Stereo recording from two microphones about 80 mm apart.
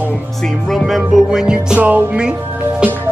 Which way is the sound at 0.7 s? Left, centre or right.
Centre.